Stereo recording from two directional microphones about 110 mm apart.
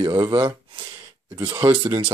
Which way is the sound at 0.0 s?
50° right (ahead or behind).